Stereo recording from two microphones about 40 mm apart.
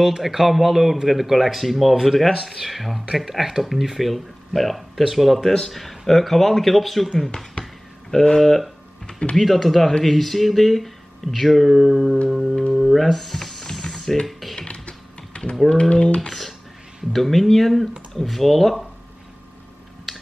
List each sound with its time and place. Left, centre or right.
0.2 s speech: centre
7.6 s a sound: centre
9.0 s typing: left
9.4 s speech: centre
12.7 s music: centre
13.0 s a sound: centre
14.7 s typing: left
15.7 s speech: centre
16.2 s speech: centre
20.1 s a sound: centre